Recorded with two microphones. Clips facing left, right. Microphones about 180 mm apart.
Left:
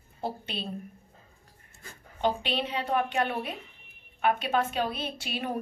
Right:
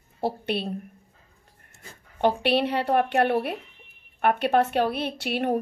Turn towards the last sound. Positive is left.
turn(degrees=-65)  # may be behind; listen again after turning